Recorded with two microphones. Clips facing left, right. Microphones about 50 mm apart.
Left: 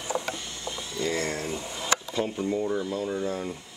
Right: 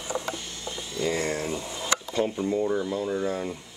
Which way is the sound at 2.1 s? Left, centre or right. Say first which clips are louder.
Right 2 dB; centre.